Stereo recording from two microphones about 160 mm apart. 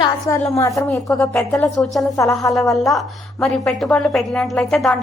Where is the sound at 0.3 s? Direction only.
20° left (ahead or behind).